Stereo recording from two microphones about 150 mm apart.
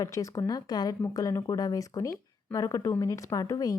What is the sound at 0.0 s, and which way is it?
Speech, 20° left (ahead or behind).